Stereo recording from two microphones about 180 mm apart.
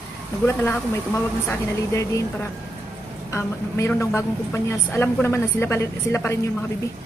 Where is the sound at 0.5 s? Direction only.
15° left (ahead or behind).